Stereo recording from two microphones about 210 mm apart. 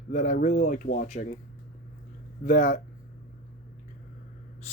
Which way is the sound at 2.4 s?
40° left (ahead or behind).